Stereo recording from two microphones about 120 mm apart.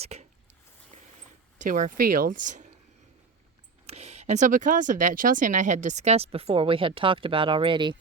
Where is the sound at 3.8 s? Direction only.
65° right (ahead or behind); by 7.9 s 45° right (ahead or behind).